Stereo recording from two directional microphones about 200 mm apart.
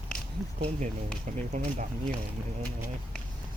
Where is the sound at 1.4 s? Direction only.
35° right (ahead or behind).